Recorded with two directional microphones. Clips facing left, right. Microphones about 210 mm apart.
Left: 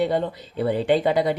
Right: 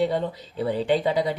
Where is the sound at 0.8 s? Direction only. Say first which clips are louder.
Left 3 dB; 60° left (ahead or behind).